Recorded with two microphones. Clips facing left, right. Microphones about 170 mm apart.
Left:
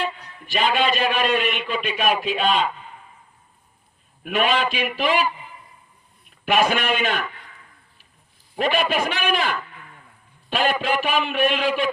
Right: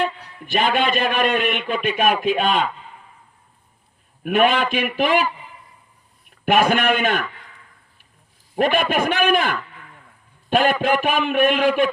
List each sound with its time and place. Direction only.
0.4 s a man's voice: 55° right (ahead or behind)
4.2 s a man's voice: 50° right (ahead or behind)
6.4 s a man's voice: 50° right (ahead or behind)
8.5 s a man's voice: 50° right (ahead or behind)